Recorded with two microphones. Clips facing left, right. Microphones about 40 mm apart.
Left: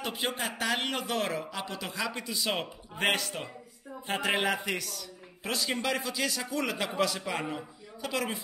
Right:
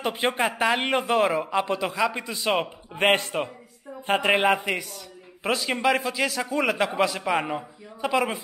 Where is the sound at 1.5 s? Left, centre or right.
Right.